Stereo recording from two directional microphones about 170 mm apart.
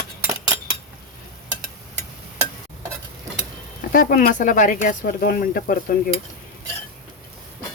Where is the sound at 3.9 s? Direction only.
55° left (ahead or behind).